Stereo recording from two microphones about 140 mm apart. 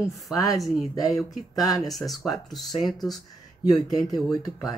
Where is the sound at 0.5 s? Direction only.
Centre (ahead or behind).